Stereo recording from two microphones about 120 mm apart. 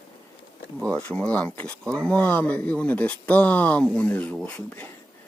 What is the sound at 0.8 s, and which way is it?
Speech, 10° left (ahead or behind).